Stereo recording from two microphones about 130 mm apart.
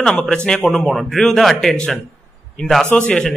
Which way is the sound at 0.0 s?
5° left (ahead or behind).